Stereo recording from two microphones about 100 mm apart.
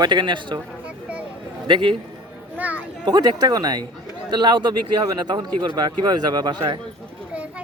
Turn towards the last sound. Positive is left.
turn(degrees=-45)  # may be behind; listen again after turning